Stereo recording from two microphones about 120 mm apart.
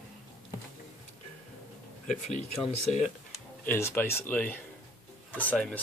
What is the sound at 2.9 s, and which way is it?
Speech, 70° left (ahead or behind).